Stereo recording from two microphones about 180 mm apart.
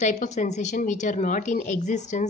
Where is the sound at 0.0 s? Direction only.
40° left (ahead or behind).